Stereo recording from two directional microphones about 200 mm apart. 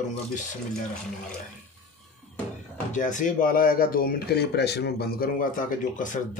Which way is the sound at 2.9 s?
40° left (ahead or behind).